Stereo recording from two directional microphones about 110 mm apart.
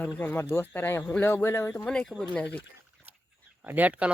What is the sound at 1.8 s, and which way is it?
Speech, 10° left (ahead or behind).